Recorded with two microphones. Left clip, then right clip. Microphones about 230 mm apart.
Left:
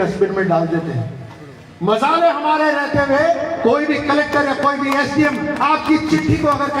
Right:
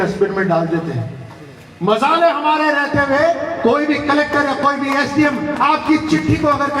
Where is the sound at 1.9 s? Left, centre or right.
Centre.